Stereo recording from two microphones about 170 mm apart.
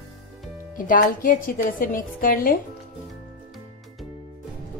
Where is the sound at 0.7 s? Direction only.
55° left (ahead or behind).